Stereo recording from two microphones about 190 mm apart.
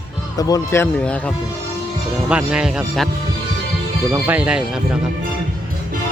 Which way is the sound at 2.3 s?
5° right (ahead or behind).